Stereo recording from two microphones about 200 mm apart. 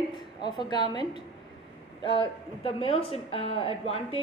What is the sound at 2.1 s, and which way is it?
Speech, 30° left (ahead or behind).